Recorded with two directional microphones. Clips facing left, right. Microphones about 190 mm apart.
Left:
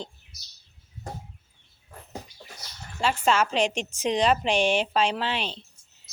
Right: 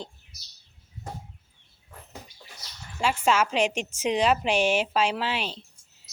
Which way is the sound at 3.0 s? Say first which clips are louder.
Even; 10° right (ahead or behind).